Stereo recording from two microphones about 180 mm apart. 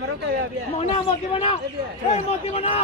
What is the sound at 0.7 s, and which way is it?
A man's voice, 30° left (ahead or behind).